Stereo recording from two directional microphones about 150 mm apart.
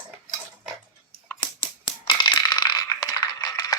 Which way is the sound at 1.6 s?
30° left (ahead or behind).